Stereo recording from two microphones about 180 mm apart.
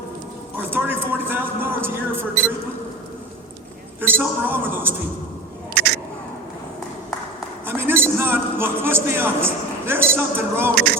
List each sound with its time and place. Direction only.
0.5 s a woman's voice: 10° right (ahead or behind)
4.0 s speech: 10° right (ahead or behind)
5.7 s a sound: 65° right (ahead or behind)
7.6 s a man's voice: 10° right (ahead or behind)